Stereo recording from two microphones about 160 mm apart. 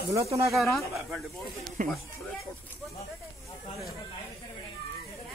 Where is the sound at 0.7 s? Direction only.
Centre (ahead or behind).